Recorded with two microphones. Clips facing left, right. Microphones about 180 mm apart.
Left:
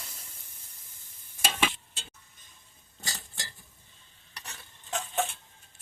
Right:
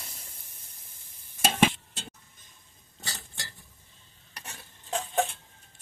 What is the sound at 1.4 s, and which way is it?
Stir, 45° right (ahead or behind).